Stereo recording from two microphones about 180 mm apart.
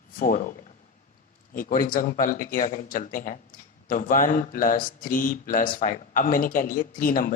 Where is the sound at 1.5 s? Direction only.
50° left (ahead or behind).